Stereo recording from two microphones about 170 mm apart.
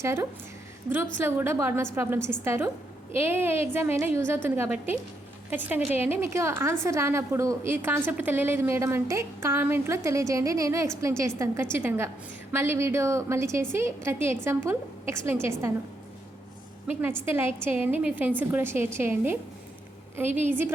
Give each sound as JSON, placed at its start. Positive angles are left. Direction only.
{"t": 0.0, "sound": "a woman's voice", "side_deg": -15}
{"t": 17.0, "sound": "a woman's voice", "side_deg": -15}